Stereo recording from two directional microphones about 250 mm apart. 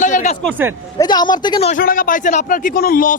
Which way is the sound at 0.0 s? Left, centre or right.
Left.